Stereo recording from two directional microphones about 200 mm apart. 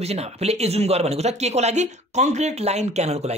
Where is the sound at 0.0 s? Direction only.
30° right (ahead or behind).